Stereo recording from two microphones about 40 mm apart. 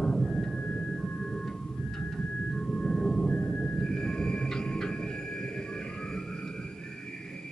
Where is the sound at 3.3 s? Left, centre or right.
Left.